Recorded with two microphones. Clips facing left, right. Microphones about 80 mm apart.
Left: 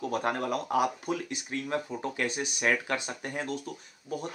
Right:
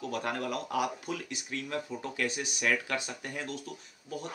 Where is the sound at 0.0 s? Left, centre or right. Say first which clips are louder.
Left 4 dB; left.